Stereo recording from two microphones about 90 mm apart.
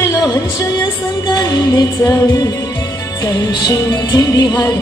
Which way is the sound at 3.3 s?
50° left (ahead or behind).